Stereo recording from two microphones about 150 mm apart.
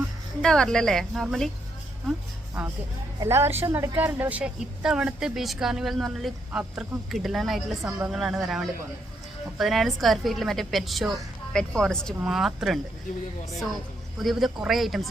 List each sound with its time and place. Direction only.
0.4 s speech: 5° left (ahead or behind)
3.2 s a woman's voice: 15° right (ahead or behind); by 12.8 s centre (ahead or behind)
14.2 s speech: centre (ahead or behind)